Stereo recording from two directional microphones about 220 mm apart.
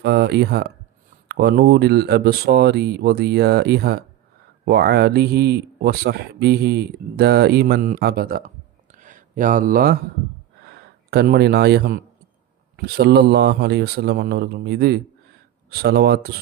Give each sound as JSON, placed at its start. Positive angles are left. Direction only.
{"t": 0.0, "sound": "speech", "side_deg": -50}
{"t": 8.9, "sound": "a sound", "side_deg": -35}
{"t": 10.7, "sound": "speech", "side_deg": -45}